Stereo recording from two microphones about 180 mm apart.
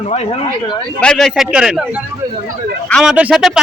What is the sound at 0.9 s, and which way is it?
Speech, 5° left (ahead or behind).